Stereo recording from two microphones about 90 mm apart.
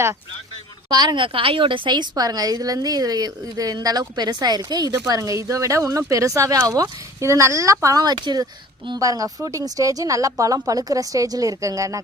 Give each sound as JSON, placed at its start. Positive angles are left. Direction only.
{"t": 0.9, "sound": "a woman's voice", "side_deg": -55}